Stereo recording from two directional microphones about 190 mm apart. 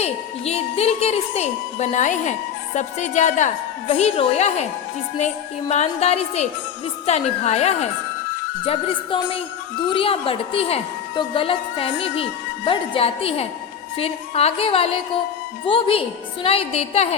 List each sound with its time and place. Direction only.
0.0 s a woman's voice: 35° left (ahead or behind)